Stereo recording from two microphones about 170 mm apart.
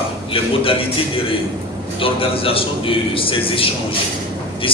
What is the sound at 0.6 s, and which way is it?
A man's voice, 30° left (ahead or behind).